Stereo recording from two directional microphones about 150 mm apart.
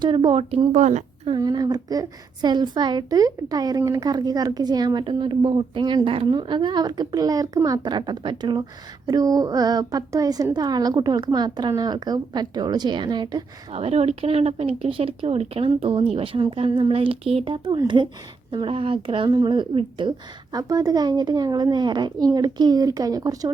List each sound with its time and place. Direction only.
0.0 s speech: 35° right (ahead or behind)
0.7 s a woman's voice: 55° right (ahead or behind)
1.3 s a woman's voice: 30° right (ahead or behind)
13.7 s a woman's voice: 45° right (ahead or behind); by 23.5 s 25° right (ahead or behind)